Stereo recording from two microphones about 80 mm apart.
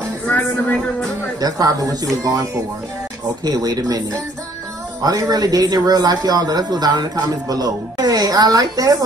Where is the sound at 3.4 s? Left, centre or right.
Right.